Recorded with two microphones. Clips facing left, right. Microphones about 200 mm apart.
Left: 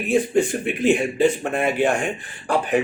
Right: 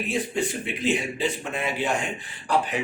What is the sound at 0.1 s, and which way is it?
Speech, 50° left (ahead or behind).